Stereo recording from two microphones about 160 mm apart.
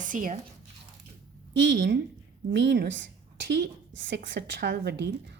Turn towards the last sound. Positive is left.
turn(degrees=-90)